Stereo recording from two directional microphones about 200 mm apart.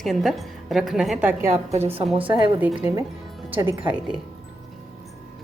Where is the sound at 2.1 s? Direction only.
25° right (ahead or behind).